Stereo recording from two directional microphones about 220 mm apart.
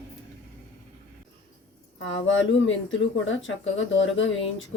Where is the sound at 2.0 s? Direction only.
60° left (ahead or behind).